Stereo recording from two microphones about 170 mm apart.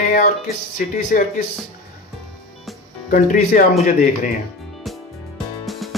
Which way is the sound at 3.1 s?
55° left (ahead or behind).